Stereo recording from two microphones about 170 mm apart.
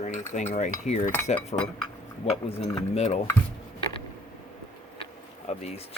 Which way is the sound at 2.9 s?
40° left (ahead or behind).